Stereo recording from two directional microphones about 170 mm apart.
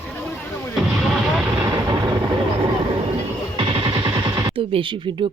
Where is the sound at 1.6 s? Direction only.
20° right (ahead or behind).